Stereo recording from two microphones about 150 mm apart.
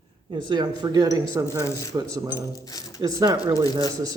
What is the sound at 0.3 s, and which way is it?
Speech, 30° right (ahead or behind).